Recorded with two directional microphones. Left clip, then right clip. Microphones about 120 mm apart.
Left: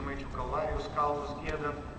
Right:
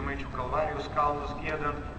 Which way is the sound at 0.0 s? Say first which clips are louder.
Right 3 dB; 5° right (ahead or behind).